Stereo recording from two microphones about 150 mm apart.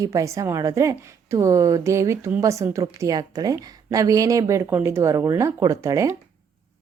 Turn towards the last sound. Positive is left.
turn(degrees=-20)  # may be behind; listen again after turning